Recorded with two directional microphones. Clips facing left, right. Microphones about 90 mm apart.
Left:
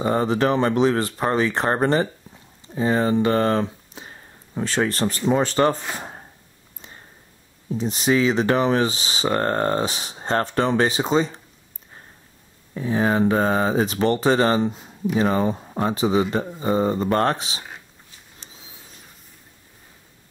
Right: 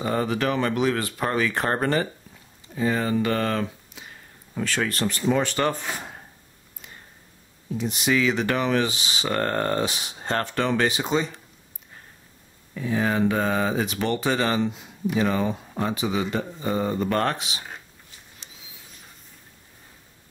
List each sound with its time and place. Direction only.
0.0 s speech: 30° left (ahead or behind)
5.9 s chopping: 30° left (ahead or behind)
7.7 s speech: 35° left (ahead or behind)
12.7 s speech: 35° left (ahead or behind)
18.4 s a sound: 35° left (ahead or behind)